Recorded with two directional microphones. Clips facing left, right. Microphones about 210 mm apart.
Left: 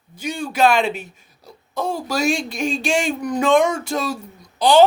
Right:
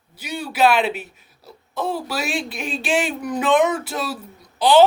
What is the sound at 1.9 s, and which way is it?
Speech, 45° left (ahead or behind).